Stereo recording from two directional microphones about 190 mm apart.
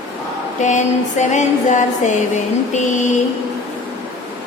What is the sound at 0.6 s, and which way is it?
Mantra, 40° left (ahead or behind).